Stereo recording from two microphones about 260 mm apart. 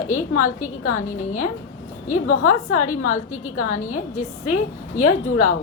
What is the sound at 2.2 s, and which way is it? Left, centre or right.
A woman's voice, left.